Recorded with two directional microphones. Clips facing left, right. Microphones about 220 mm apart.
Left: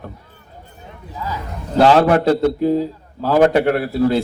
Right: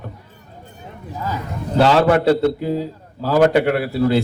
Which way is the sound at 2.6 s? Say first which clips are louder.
Left 5 dB; 40° left (ahead or behind).